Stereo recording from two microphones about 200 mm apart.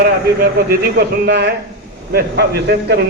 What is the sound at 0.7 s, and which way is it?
A man's voice, 55° right (ahead or behind).